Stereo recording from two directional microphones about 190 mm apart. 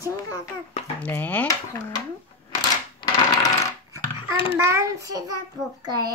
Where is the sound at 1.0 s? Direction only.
10° left (ahead or behind).